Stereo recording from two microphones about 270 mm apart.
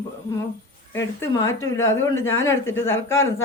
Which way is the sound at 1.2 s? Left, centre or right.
Centre.